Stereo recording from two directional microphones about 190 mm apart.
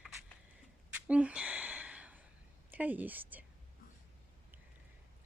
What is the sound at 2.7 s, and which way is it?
Speech, 10° right (ahead or behind).